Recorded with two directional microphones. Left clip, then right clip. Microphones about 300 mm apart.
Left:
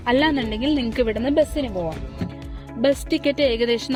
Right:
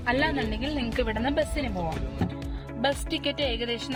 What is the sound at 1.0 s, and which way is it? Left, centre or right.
Speech, left.